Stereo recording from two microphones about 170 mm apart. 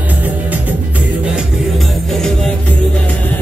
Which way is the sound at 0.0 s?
10° right (ahead or behind).